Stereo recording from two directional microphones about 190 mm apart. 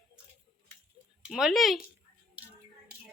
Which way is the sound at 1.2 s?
Centre (ahead or behind).